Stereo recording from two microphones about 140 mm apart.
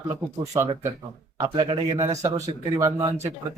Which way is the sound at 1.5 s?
35° right (ahead or behind).